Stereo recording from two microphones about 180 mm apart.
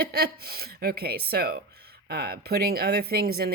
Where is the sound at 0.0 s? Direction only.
60° right (ahead or behind).